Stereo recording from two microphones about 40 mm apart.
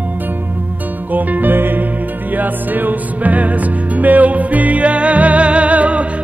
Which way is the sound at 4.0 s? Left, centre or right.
Right.